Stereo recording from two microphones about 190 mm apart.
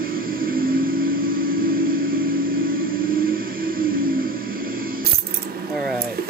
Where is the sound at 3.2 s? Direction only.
50° right (ahead or behind).